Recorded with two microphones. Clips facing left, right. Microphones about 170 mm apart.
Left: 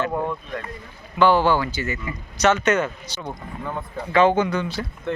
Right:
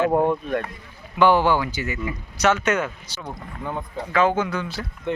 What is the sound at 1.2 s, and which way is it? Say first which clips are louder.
A man's voice: even; 15° right (ahead or behind).